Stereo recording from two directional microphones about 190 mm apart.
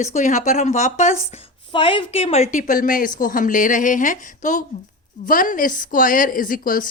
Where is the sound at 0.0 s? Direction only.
40° left (ahead or behind).